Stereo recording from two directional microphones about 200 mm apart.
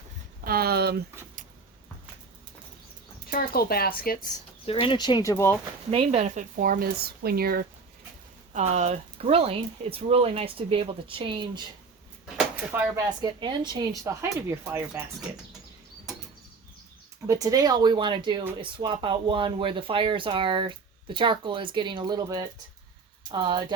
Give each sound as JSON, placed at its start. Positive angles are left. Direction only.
{"t": 0.4, "sound": "a sound", "side_deg": -50}
{"t": 3.2, "sound": "speech", "side_deg": 50}
{"t": 4.6, "sound": "speech", "side_deg": 25}
{"t": 5.9, "sound": "speech", "side_deg": -30}
{"t": 8.5, "sound": "speech", "side_deg": -35}
{"t": 12.7, "sound": "speech", "side_deg": -15}
{"t": 17.2, "sound": "speech", "side_deg": -15}